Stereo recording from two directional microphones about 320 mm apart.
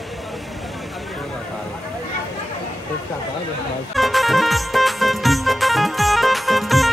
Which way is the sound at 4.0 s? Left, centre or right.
Centre.